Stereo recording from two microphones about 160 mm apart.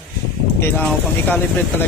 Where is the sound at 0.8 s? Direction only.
10° left (ahead or behind).